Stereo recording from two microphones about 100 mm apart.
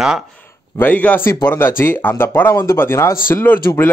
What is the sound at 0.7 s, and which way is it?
Speech, 15° left (ahead or behind).